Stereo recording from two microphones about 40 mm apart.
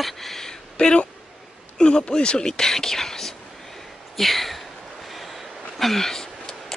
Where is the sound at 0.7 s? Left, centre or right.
Left.